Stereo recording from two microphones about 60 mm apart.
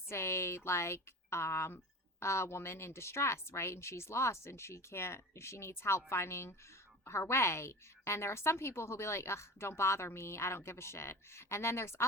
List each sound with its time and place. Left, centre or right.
0.1 s a woman's voice: left